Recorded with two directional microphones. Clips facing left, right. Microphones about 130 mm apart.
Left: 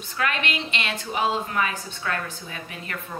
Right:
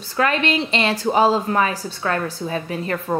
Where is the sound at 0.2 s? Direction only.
35° right (ahead or behind).